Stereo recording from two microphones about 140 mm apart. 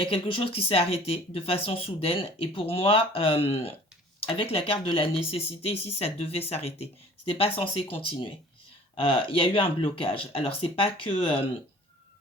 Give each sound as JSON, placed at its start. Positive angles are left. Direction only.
{"t": 0.0, "sound": "speech", "side_deg": 40}